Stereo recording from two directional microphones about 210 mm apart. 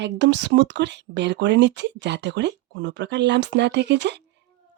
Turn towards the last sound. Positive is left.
turn(degrees=-55)  # may be behind; listen again after turning